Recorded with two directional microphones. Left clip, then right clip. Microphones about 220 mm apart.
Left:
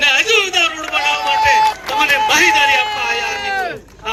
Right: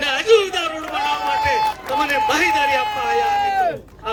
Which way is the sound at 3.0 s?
55° right (ahead or behind).